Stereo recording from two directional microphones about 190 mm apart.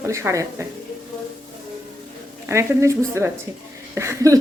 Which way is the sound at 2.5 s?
15° right (ahead or behind).